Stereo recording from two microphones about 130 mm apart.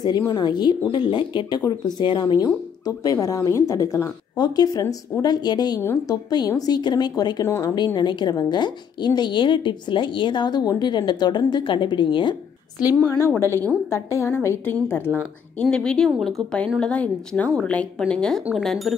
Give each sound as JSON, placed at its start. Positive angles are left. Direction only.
{"t": 0.0, "sound": "a woman's voice", "side_deg": 30}
{"t": 5.8, "sound": "speech", "side_deg": 20}
{"t": 6.3, "sound": "a woman's voice", "side_deg": 30}
{"t": 7.4, "sound": "speech", "side_deg": 20}
{"t": 7.7, "sound": "a woman's voice", "side_deg": 35}
{"t": 13.2, "sound": "speech", "side_deg": 20}
{"t": 15.1, "sound": "a woman's voice", "side_deg": 5}